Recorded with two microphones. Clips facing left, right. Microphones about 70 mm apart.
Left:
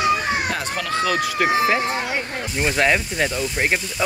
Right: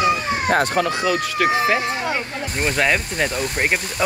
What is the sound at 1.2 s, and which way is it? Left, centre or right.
Speech, centre.